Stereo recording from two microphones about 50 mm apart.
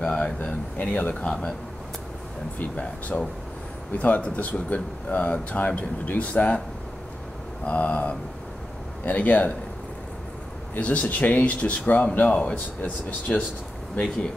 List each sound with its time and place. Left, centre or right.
0.0 s a sound: centre
0.4 s speech: left
4.0 s speech: left
7.6 s speech: left
10.8 s speech: left